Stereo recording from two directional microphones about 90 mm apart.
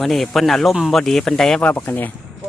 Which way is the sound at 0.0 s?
Centre (ahead or behind).